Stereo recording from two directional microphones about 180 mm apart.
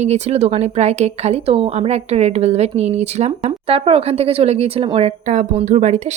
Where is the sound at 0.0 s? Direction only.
40° right (ahead or behind).